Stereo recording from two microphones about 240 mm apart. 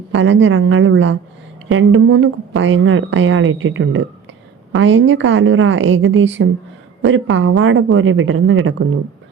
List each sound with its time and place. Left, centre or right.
0.1 s a woman's voice: right